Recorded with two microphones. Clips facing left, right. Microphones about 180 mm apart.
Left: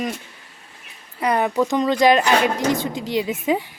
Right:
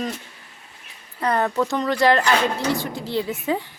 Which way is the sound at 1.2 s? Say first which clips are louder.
Left 2 dB; 15° left (ahead or behind).